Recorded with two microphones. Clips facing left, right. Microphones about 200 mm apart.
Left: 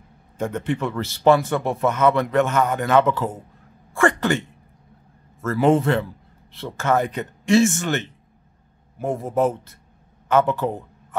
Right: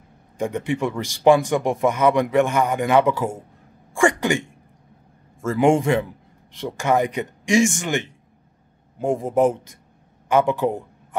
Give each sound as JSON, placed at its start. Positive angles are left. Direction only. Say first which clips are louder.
{"t": 0.4, "sound": "a man's voice", "louder": "right 1 dB", "side_deg": -10}